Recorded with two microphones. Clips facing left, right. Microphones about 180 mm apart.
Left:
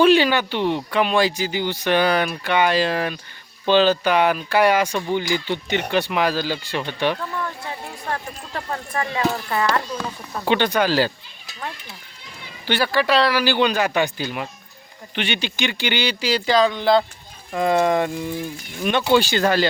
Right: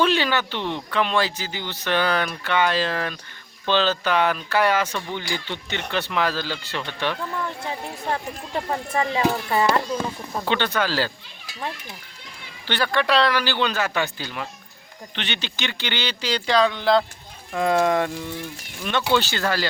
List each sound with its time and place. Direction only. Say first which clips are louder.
0.0 s speech: left 6 dB; 15° left (ahead or behind)
8.1 s speech: right 2 dB; 20° right (ahead or behind)
10.4 s speech: left 5 dB; 15° left (ahead or behind)
12.6 s speech: left 3 dB; 10° left (ahead or behind)
18.8 s speech: left 4 dB; 15° left (ahead or behind)